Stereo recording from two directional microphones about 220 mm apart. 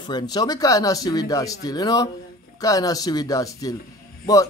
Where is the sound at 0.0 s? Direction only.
20° left (ahead or behind).